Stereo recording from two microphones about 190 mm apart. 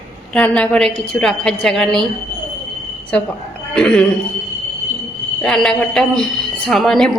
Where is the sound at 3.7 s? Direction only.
5° left (ahead or behind).